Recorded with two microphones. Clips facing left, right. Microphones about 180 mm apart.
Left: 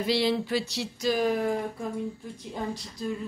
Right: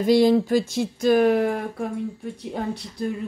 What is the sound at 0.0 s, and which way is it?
Speech, 45° right (ahead or behind).